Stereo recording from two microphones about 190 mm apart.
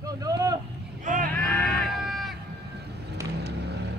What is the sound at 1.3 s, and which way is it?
Sheep, 5° left (ahead or behind).